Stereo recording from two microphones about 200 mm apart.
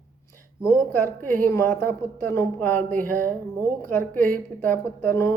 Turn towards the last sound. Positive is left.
turn(degrees=10)  # may be behind; listen again after turning